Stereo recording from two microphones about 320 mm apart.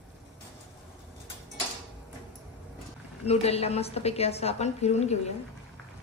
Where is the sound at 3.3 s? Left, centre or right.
Centre.